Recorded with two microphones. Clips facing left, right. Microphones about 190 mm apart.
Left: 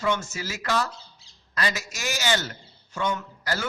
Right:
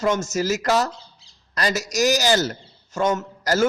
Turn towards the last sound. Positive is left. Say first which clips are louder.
# right 8 dB
turn(degrees=-45)  # may be behind; listen again after turning